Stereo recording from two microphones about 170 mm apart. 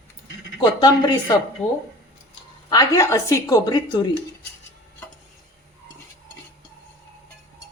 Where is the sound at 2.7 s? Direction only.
20° left (ahead or behind).